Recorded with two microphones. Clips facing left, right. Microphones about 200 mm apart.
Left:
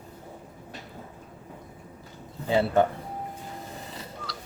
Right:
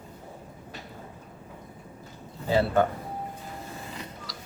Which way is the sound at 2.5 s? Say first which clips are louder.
Left 1 dB; 20° left (ahead or behind).